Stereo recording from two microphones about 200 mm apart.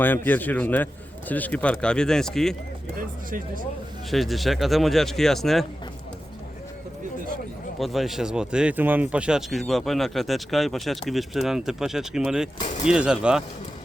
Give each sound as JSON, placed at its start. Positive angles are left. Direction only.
{"t": 0.3, "sound": "a man's voice", "side_deg": 10}
{"t": 3.0, "sound": "speech", "side_deg": -45}
{"t": 4.1, "sound": "speech", "side_deg": 0}
{"t": 7.8, "sound": "speech", "side_deg": 0}